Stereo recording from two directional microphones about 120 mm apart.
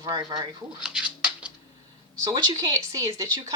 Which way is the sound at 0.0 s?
35° right (ahead or behind).